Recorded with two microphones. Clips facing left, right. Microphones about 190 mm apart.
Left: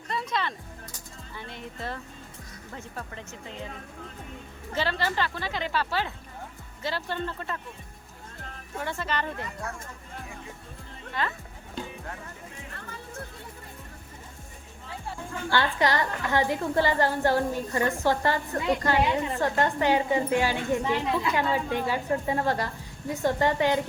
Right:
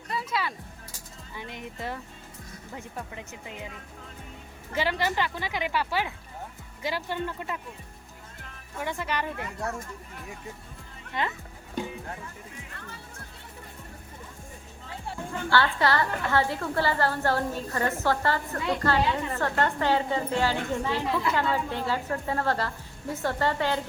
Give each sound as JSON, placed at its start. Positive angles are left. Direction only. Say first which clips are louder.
{"t": 0.1, "sound": "music", "louder": "left 1 dB", "side_deg": -5}
{"t": 1.4, "sound": "speech", "louder": "right 1 dB", "side_deg": -15}
{"t": 4.7, "sound": "speech", "louder": "right 1 dB", "side_deg": -15}
{"t": 8.8, "sound": "speech", "louder": "even", "side_deg": -15}
{"t": 11.2, "sound": "speech", "louder": "even", "side_deg": -20}
{"t": 15.4, "sound": "a woman's voice", "louder": "right 1 dB", "side_deg": 15}